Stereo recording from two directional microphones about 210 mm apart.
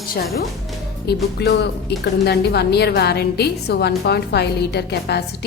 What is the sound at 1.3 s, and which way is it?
A woman's voice, 50° left (ahead or behind).